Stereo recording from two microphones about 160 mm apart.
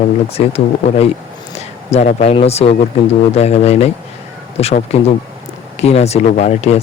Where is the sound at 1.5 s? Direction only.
45° left (ahead or behind).